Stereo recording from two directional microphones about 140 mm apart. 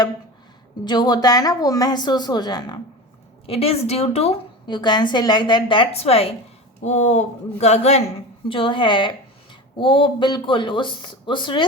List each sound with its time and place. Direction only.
0.9 s a woman's voice: 30° left (ahead or behind)
3.4 s speech: 45° left (ahead or behind)
4.6 s a woman's voice: 30° left (ahead or behind)
6.8 s speech: 55° left (ahead or behind)
8.4 s a woman's voice: 40° left (ahead or behind)